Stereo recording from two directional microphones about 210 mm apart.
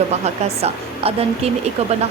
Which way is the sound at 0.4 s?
30° right (ahead or behind).